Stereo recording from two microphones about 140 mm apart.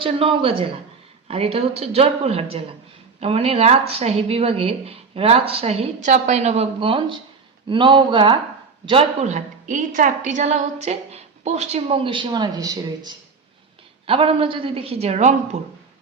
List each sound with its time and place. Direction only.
0.0 s a woman's voice: 40° right (ahead or behind)
8.9 s a woman's voice: 45° right (ahead or behind); by 13.1 s 30° right (ahead or behind)
14.1 s a woman's voice: 40° right (ahead or behind)